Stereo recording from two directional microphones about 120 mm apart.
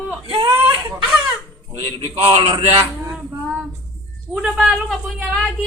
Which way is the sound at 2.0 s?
50° right (ahead or behind).